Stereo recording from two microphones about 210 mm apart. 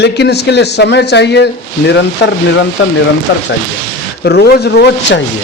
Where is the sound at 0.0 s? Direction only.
55° left (ahead or behind).